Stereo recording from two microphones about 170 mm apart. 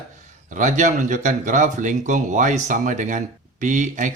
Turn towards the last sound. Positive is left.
turn(degrees=-45)  # may be behind; listen again after turning